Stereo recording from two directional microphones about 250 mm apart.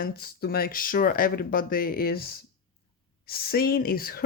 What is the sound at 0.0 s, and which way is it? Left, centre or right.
Speech, left.